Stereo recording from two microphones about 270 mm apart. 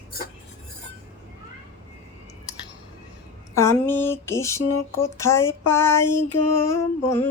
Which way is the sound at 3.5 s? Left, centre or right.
Centre.